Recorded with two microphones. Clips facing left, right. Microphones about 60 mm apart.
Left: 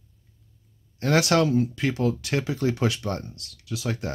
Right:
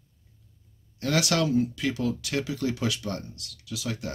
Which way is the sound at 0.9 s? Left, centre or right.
Left.